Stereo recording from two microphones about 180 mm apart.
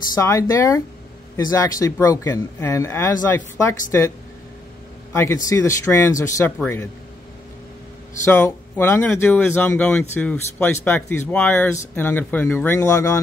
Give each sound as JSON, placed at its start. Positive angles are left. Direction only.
{"t": 0.1, "sound": "speech", "side_deg": 20}
{"t": 5.1, "sound": "speech", "side_deg": 15}
{"t": 8.2, "sound": "speech", "side_deg": 15}